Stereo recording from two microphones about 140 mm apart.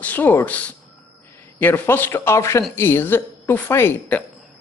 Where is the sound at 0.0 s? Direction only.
10° left (ahead or behind).